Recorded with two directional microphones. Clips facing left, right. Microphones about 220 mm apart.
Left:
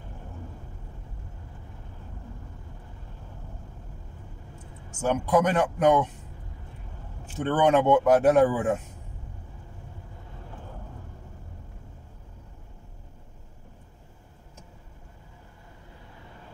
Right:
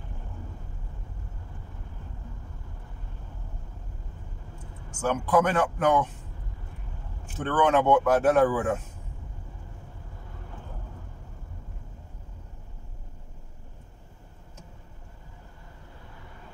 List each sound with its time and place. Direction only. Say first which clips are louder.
5.0 s speech: left 1 dB; 20° left (ahead or behind)
7.5 s speech: left 1 dB; 20° left (ahead or behind)